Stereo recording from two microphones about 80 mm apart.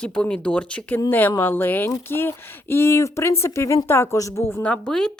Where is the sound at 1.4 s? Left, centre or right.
Left.